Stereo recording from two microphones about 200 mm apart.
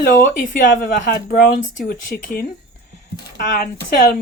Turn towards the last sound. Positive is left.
turn(degrees=45)  # may be behind; listen again after turning